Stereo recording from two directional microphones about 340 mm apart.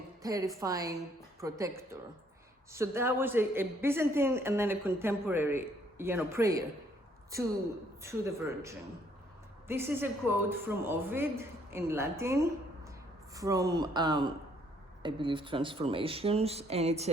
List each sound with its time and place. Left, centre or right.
0.2 s speech: centre
8.0 s speech: centre